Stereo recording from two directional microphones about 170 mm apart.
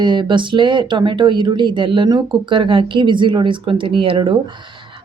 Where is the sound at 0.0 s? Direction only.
25° right (ahead or behind).